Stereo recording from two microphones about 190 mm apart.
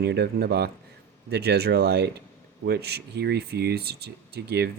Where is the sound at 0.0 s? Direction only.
60° right (ahead or behind).